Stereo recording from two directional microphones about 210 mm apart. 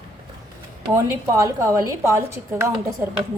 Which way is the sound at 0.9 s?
15° right (ahead or behind).